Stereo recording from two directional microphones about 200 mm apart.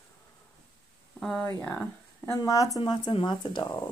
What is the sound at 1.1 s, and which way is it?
Speech, 5° left (ahead or behind).